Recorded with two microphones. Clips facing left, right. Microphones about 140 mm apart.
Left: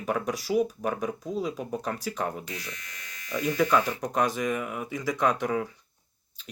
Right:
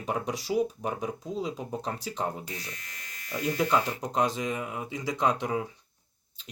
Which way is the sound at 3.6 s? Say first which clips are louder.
Left 2 dB; 20° right (ahead or behind).